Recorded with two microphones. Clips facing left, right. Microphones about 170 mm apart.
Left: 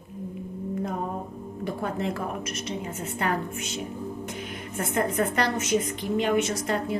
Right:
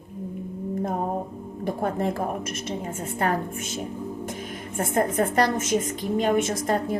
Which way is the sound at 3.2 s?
45° right (ahead or behind).